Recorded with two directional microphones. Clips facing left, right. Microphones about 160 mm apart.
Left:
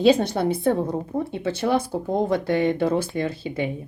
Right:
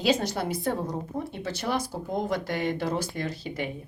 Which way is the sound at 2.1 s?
30° left (ahead or behind).